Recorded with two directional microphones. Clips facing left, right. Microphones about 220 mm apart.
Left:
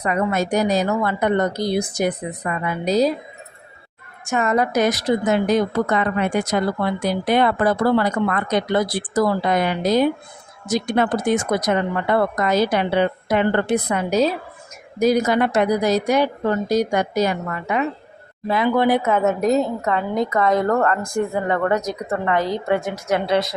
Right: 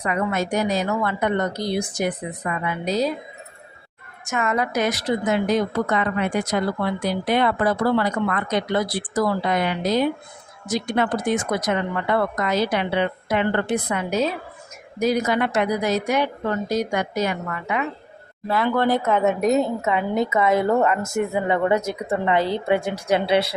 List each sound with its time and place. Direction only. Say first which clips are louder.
0.0 s speech: left 3 dB; 40° left (ahead or behind)
4.3 s a woman's voice: left 4 dB; 35° left (ahead or behind)
18.4 s a woman's voice: left 3 dB; 15° left (ahead or behind); by 23.2 s 30° right (ahead or behind)